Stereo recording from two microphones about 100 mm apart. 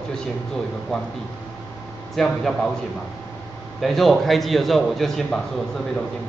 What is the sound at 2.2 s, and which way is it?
Speech, centre (ahead or behind).